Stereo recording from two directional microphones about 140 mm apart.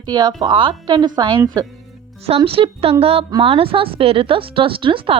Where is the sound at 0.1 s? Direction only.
30° right (ahead or behind).